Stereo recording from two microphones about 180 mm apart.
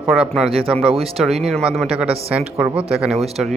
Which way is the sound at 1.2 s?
Centre (ahead or behind).